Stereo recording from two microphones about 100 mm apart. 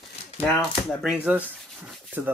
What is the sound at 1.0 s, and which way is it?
Speech, 15° right (ahead or behind).